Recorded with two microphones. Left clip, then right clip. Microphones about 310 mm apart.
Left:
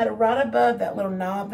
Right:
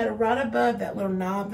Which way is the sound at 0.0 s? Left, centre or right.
Centre.